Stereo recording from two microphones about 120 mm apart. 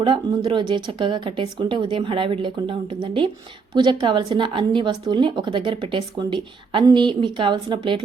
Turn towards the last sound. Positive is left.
turn(degrees=-40)  # may be behind; listen again after turning